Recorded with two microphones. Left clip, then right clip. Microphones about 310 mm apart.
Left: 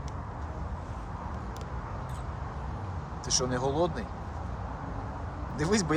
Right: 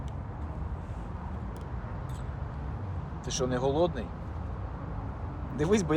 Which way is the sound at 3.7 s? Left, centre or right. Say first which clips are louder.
Right 2 dB; centre.